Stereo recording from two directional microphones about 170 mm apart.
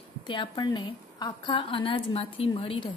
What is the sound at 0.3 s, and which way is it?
A woman's voice, 25° left (ahead or behind).